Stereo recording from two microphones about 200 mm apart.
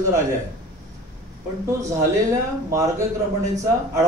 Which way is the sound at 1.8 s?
15° right (ahead or behind).